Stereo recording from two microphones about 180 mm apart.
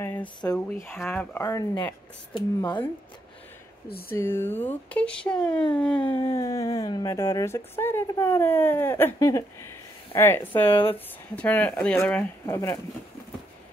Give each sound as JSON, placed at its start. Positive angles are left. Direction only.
{"t": 0.2, "sound": "speech", "side_deg": 25}
{"t": 0.6, "sound": "a woman's voice", "side_deg": 10}
{"t": 4.1, "sound": "a woman's voice", "side_deg": 15}
{"t": 5.8, "sound": "a sound", "side_deg": 5}
{"t": 6.2, "sound": "a woman's voice", "side_deg": 15}
{"t": 10.7, "sound": "speech", "side_deg": 30}
{"t": 11.3, "sound": "a woman's voice", "side_deg": 10}